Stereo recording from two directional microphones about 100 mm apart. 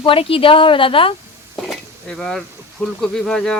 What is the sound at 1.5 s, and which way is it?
Cutlery, centre (ahead or behind).